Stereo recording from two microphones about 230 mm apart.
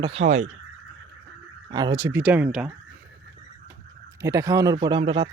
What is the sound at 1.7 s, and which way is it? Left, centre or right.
Speech, centre.